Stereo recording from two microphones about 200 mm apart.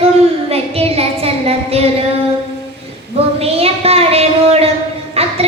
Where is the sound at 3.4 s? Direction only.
30° right (ahead or behind).